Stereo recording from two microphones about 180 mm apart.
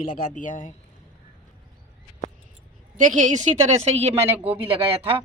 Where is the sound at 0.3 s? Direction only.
45° left (ahead or behind).